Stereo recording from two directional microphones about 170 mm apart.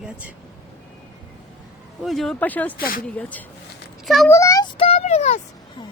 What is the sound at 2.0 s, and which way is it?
Speech, centre (ahead or behind).